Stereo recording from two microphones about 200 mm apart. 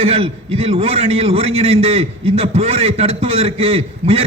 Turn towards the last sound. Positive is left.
turn(degrees=-30)  # may be behind; listen again after turning